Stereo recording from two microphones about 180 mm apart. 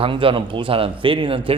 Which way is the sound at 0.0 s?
30° right (ahead or behind).